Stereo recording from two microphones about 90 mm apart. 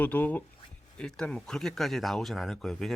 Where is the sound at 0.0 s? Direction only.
20° left (ahead or behind).